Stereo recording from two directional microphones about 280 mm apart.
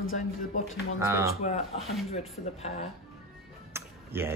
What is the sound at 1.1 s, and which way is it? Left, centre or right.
Speech, centre.